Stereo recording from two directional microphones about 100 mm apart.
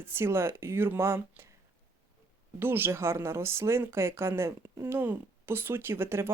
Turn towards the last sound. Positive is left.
turn(degrees=-25)  # may be behind; listen again after turning